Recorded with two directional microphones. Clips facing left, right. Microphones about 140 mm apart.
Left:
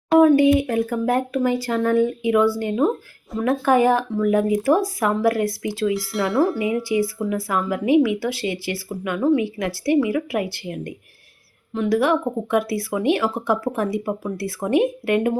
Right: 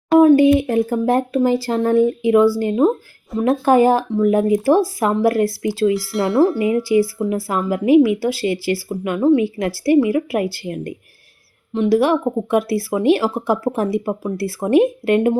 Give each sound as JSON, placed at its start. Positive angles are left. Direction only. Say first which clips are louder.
{"t": 0.2, "sound": "speech", "louder": "right 3 dB", "side_deg": -30}
{"t": 5.9, "sound": "speech", "louder": "right 4 dB", "side_deg": 0}
{"t": 7.2, "sound": "speech", "louder": "right 3 dB", "side_deg": -30}
{"t": 11.7, "sound": "speech", "louder": "right 4 dB", "side_deg": -25}